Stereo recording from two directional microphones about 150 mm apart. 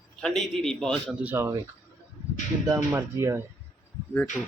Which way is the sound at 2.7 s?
20° right (ahead or behind).